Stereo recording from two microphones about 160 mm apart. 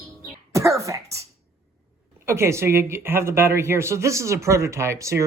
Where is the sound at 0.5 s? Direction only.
20° right (ahead or behind).